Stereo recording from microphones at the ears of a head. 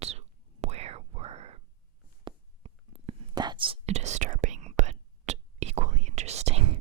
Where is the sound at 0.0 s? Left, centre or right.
Right.